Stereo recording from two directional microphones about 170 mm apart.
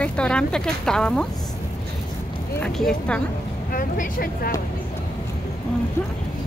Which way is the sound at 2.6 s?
5° left (ahead or behind).